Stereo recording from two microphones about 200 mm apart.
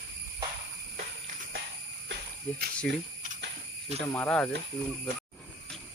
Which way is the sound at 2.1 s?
50° right (ahead or behind).